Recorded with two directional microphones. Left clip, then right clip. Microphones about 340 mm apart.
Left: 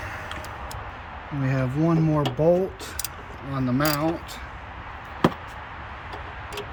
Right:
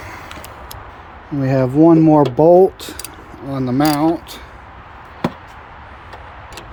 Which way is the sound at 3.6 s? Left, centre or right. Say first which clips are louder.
Right 8 dB; right.